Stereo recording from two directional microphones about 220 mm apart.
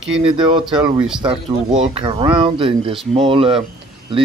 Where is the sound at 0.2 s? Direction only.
20° right (ahead or behind).